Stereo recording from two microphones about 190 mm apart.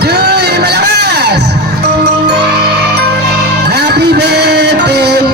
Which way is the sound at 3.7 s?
60° right (ahead or behind).